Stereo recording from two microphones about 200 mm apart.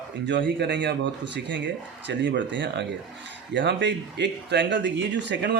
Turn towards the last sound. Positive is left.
turn(degrees=-60)  # may be behind; listen again after turning